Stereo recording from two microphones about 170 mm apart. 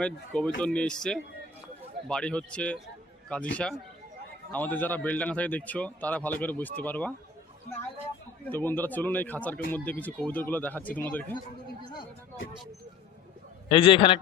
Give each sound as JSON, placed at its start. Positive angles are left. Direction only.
{"t": 0.0, "sound": "speech", "side_deg": 5}
{"t": 8.4, "sound": "speech", "side_deg": 10}
{"t": 13.7, "sound": "a man's voice", "side_deg": 30}